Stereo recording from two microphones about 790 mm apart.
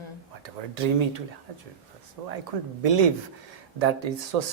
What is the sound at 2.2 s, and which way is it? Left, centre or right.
Speech, right.